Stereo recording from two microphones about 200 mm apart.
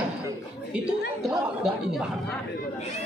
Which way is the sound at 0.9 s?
5° right (ahead or behind).